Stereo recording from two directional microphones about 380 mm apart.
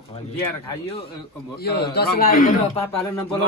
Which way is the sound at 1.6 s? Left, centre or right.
Left.